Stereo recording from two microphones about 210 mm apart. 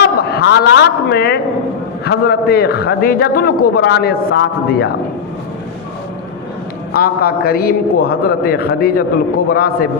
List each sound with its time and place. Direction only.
0.0 s a man's voice: 50° left (ahead or behind)
6.9 s a man's voice: 45° left (ahead or behind)